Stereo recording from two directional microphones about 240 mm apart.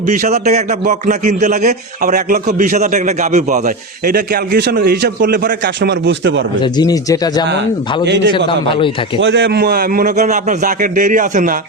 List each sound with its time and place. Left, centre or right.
0.1 s a man's voice: right
6.6 s speech: centre
8.0 s a man's voice: right
8.3 s a man's voice: left
9.2 s a man's voice: right